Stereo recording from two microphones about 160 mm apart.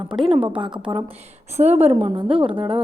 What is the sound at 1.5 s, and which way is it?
A woman's voice, 45° right (ahead or behind).